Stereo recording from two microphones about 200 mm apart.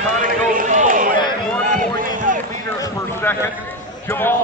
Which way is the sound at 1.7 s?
40° right (ahead or behind).